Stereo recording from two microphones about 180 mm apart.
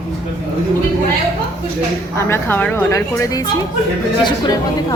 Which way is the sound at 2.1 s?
15° left (ahead or behind).